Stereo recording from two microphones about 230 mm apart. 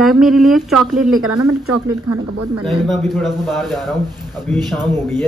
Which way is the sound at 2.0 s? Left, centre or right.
Right.